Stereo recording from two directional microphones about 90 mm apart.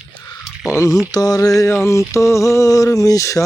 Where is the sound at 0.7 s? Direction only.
35° left (ahead or behind).